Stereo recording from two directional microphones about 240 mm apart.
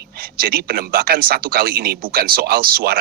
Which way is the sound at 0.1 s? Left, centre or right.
Right.